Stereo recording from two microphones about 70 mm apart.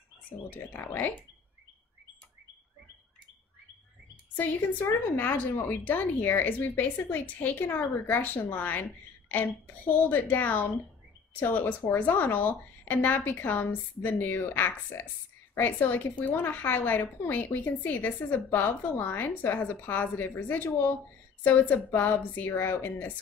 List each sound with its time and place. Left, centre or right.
0.5 s a woman's voice: left
4.4 s a woman's voice: left